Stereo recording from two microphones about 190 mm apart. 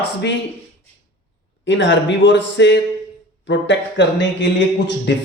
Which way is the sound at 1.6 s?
75° left (ahead or behind).